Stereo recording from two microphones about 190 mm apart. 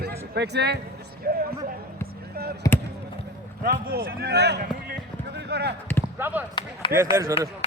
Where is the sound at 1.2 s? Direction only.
55° right (ahead or behind).